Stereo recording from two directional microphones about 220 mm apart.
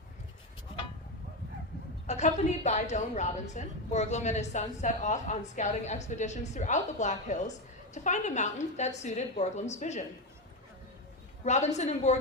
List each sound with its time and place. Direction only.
2.0 s a woman's voice: 30° left (ahead or behind)
11.4 s a woman's voice: 30° left (ahead or behind)